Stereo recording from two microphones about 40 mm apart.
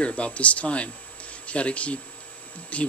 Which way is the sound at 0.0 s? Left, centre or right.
Left.